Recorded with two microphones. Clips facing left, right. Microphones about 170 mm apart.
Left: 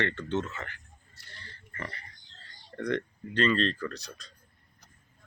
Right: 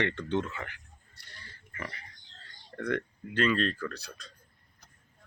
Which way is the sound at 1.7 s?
5° right (ahead or behind).